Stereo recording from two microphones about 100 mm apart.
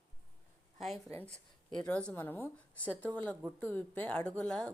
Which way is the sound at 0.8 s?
Centre (ahead or behind).